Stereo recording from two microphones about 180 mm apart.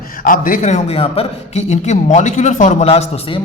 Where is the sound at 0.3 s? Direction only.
50° left (ahead or behind).